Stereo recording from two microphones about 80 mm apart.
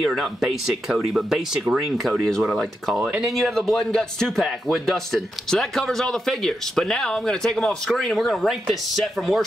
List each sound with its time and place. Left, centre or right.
0.0 s speech: centre